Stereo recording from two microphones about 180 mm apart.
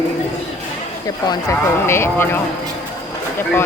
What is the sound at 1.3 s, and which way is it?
Speech, 15° left (ahead or behind).